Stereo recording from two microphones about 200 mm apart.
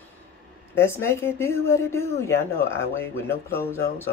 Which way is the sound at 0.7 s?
10° left (ahead or behind).